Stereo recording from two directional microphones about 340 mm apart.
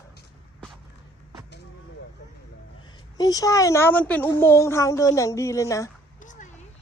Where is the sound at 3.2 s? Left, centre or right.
Centre.